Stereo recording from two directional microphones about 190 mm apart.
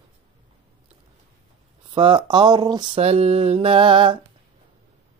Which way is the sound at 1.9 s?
25° right (ahead or behind).